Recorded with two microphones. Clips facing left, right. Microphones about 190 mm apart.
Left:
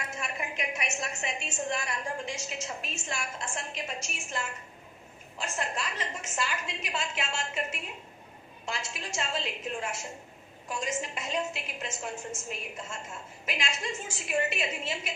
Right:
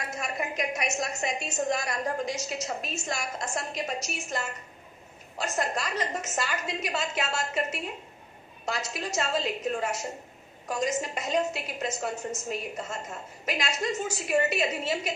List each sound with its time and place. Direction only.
0.0 s a woman's voice: 40° right (ahead or behind)